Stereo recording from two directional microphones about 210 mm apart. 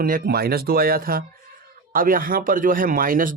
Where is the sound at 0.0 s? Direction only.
45° right (ahead or behind).